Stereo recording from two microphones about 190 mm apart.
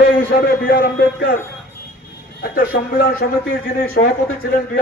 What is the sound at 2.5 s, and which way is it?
A man's voice, 50° left (ahead or behind).